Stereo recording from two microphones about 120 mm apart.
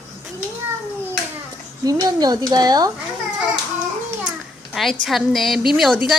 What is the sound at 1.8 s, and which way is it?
Speech, 30° right (ahead or behind).